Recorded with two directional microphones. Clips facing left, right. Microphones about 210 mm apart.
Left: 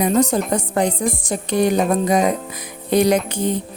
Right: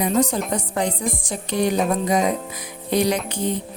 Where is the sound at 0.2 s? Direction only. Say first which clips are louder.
Left 3 dB; 45° left (ahead or behind).